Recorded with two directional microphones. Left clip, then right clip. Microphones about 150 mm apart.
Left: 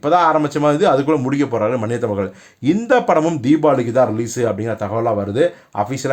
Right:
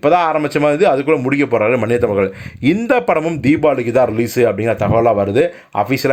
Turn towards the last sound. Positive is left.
turn(degrees=-20)  # may be behind; listen again after turning